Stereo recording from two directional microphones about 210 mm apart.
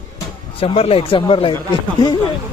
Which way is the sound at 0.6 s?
25° left (ahead or behind).